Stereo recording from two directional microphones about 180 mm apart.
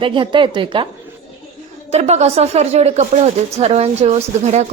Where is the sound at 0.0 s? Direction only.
25° right (ahead or behind).